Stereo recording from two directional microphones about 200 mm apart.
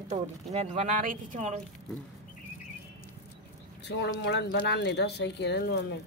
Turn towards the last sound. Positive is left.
turn(degrees=55)  # may be behind; listen again after turning